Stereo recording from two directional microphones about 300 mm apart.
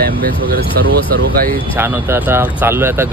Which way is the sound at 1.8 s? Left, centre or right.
Centre.